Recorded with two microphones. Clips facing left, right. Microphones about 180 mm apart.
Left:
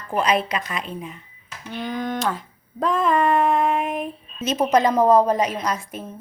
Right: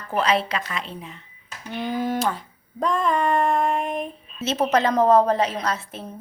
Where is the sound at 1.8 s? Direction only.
5° right (ahead or behind).